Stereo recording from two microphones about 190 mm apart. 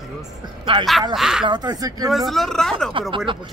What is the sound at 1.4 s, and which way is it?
Speech, 20° right (ahead or behind).